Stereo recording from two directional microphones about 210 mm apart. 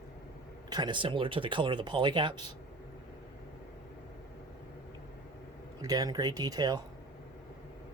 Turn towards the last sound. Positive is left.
turn(degrees=-20)  # may be behind; listen again after turning